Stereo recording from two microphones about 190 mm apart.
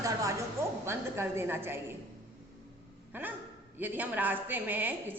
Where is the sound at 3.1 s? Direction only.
10° right (ahead or behind).